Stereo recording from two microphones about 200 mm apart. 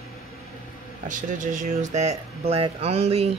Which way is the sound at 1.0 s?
40° right (ahead or behind).